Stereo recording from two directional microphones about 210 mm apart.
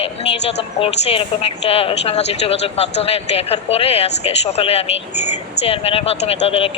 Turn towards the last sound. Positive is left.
turn(degrees=25)  # may be behind; listen again after turning